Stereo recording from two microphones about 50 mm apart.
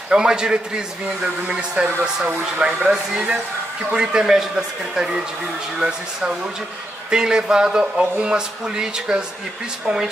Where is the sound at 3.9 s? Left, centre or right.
Centre.